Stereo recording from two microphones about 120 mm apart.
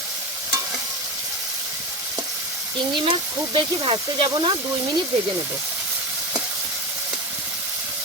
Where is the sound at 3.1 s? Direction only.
45° right (ahead or behind).